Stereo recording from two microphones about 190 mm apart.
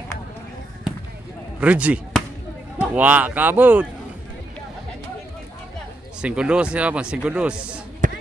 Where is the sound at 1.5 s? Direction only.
5° right (ahead or behind).